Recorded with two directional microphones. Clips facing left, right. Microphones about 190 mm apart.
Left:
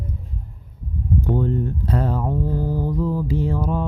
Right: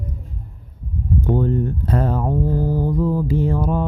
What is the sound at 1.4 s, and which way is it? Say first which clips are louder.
Mantra: right 2 dB; 55° right (ahead or behind).